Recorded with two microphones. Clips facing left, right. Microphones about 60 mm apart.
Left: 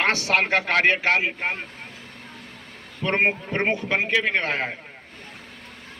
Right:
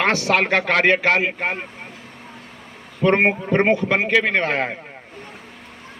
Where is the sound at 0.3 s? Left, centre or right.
Right.